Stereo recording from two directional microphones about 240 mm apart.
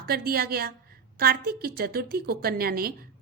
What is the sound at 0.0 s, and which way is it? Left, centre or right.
A woman's voice, right.